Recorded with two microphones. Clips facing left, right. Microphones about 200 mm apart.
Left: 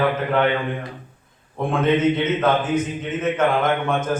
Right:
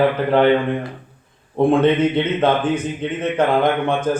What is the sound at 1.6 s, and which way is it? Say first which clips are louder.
A man's voice: right 5 dB; 30° right (ahead or behind).